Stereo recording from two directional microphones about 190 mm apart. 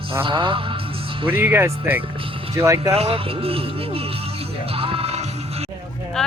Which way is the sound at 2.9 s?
30° right (ahead or behind).